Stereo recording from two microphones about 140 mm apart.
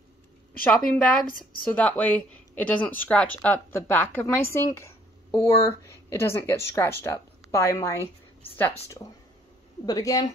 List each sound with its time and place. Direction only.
0.7 s a woman's voice: 5° left (ahead or behind)
9.8 s a woman's voice: 25° left (ahead or behind)